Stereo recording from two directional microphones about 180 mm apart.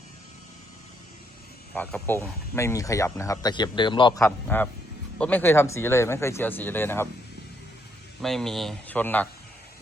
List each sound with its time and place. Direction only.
1.7 s speech: 5° left (ahead or behind); by 4.2 s 25° left (ahead or behind)
4.2 s speech: 10° left (ahead or behind)
8.2 s speech: centre (ahead or behind)